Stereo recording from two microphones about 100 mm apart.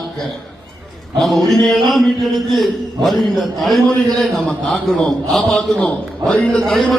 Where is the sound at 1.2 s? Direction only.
Centre (ahead or behind).